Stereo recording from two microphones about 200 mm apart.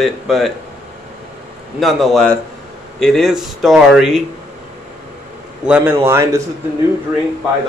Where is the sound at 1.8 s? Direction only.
Centre (ahead or behind).